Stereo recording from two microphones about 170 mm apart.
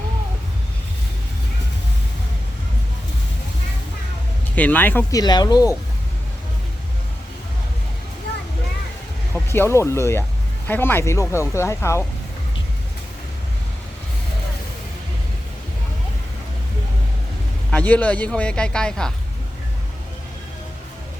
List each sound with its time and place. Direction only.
4.5 s speech: 10° left (ahead or behind)
5.2 s speech: 25° left (ahead or behind)
9.3 s speech: 15° left (ahead or behind)
17.7 s speech: 5° left (ahead or behind)